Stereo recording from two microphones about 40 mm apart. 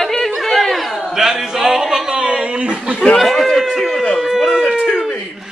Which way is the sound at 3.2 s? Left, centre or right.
Centre.